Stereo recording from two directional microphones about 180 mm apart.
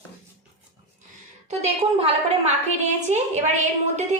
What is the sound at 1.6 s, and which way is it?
A woman's voice, 35° right (ahead or behind).